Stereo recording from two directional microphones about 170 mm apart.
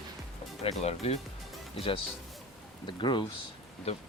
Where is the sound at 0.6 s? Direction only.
40° left (ahead or behind).